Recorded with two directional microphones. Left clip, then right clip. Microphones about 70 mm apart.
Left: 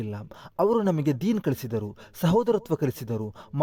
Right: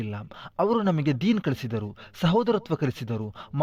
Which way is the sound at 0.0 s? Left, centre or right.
Left.